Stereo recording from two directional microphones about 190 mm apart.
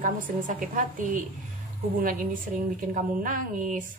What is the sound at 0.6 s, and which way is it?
Speech, 45° right (ahead or behind).